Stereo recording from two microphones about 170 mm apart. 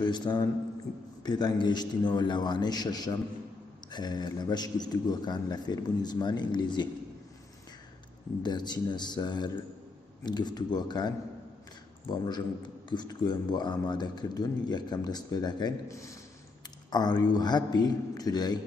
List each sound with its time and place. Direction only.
0.0 s speech: 25° left (ahead or behind)
8.4 s speech: 25° left (ahead or behind)